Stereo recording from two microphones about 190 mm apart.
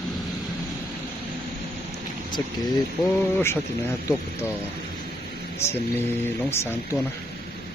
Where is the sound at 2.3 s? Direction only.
25° left (ahead or behind).